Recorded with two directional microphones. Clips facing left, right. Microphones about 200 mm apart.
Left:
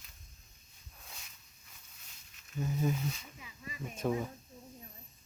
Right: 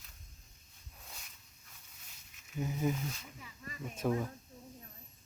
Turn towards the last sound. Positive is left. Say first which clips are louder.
# even
turn(degrees=10)  # may be behind; listen again after turning